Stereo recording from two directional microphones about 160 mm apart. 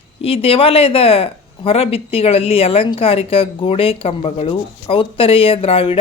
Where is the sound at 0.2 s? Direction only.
35° left (ahead or behind).